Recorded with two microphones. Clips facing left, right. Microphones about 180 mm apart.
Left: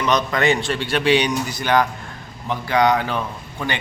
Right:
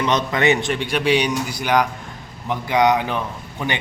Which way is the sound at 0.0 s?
25° right (ahead or behind).